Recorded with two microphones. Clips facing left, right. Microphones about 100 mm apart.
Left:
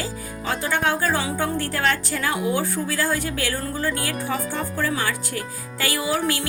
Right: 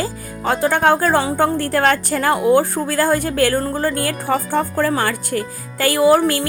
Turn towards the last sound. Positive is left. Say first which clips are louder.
# right 10 dB
turn(degrees=-50)  # may be behind; listen again after turning